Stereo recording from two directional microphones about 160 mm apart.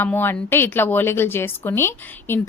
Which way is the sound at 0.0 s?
15° left (ahead or behind).